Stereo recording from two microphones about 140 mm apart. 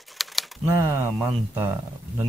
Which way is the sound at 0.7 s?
15° right (ahead or behind).